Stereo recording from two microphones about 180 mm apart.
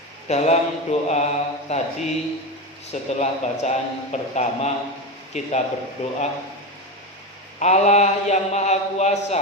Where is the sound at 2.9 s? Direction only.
40° left (ahead or behind).